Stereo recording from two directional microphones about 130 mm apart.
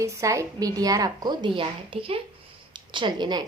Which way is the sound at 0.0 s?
25° right (ahead or behind).